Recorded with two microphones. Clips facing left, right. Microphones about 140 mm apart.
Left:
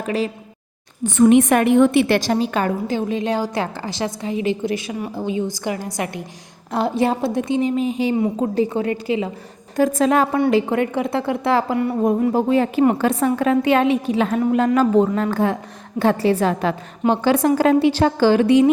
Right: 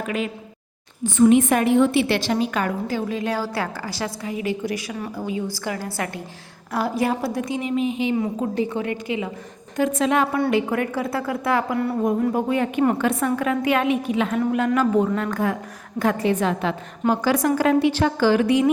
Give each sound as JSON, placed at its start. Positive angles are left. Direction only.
{"t": 1.1, "sound": "a woman's voice", "side_deg": 65}
{"t": 10.5, "sound": "a woman's voice", "side_deg": 25}
{"t": 17.1, "sound": "a woman's voice", "side_deg": 30}